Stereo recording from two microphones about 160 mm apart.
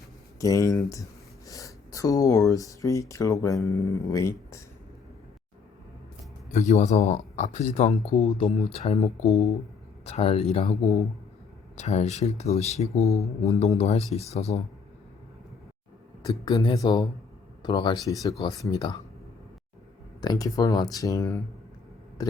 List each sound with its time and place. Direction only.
0.3 s speech: 20° left (ahead or behind)
6.5 s speech: 45° left (ahead or behind)
11.8 s speech: 45° left (ahead or behind)
16.5 s speech: 25° left (ahead or behind)
20.2 s speech: 25° left (ahead or behind)
22.2 s a sound: 25° left (ahead or behind)